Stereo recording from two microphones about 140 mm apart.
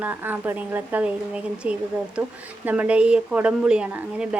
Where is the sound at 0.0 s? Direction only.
15° right (ahead or behind).